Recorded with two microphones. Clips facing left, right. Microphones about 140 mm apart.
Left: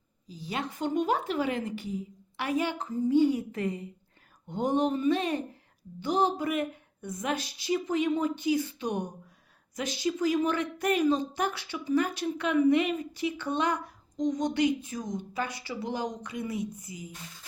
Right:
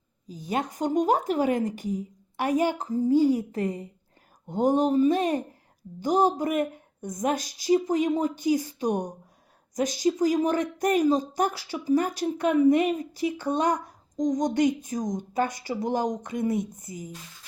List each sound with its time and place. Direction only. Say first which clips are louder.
0.3 s a woman's voice: right 5 dB; 45° right (ahead or behind)